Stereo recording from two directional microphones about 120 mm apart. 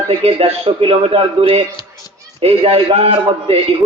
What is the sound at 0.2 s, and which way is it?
A man's voice, 55° right (ahead or behind).